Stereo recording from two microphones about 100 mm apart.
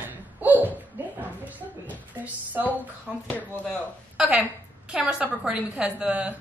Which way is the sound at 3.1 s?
Centre (ahead or behind).